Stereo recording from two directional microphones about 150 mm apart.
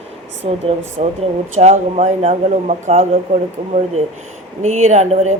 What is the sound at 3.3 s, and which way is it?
Speech, 60° right (ahead or behind).